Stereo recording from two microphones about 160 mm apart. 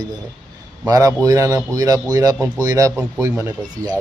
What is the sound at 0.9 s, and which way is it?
Speech, 20° right (ahead or behind).